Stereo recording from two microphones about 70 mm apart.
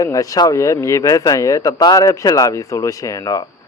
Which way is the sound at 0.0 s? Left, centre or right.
Left.